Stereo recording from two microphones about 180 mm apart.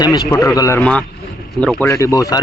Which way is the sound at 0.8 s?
5° left (ahead or behind).